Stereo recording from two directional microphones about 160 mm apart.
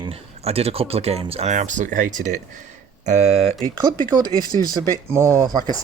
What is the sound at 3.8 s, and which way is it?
Speech, 25° right (ahead or behind).